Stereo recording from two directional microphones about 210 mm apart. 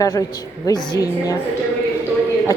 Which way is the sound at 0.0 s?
15° left (ahead or behind).